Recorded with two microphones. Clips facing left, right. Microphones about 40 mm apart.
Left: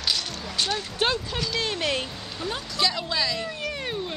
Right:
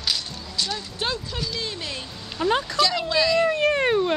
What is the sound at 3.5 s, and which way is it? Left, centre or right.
Speech, right.